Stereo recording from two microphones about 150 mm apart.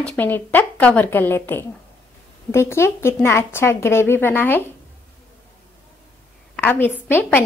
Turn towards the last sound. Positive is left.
turn(degrees=15)  # may be behind; listen again after turning